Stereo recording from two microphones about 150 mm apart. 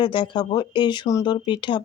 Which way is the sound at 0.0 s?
30° left (ahead or behind).